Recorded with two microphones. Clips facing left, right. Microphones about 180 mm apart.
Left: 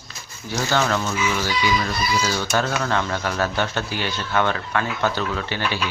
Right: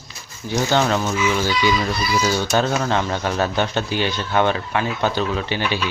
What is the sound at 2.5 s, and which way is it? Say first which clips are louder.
Speech: right 1 dB; 20° right (ahead or behind).